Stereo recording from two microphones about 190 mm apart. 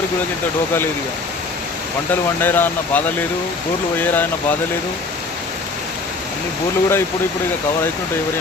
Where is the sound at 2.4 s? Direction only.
10° left (ahead or behind).